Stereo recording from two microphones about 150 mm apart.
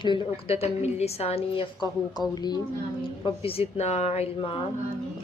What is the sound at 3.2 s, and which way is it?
Speech, 40° left (ahead or behind).